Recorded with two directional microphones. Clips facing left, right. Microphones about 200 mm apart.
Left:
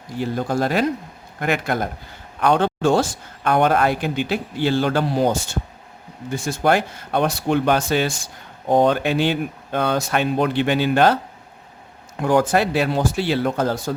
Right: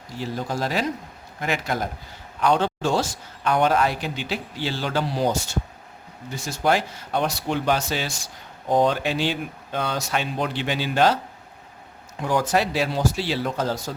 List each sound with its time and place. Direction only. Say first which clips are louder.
0.2 s a man's voice: left 6 dB; 55° left (ahead or behind)
12.2 s a man's voice: left 5 dB; 55° left (ahead or behind)